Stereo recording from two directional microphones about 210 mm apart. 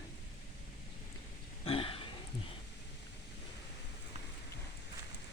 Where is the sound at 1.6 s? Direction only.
25° left (ahead or behind).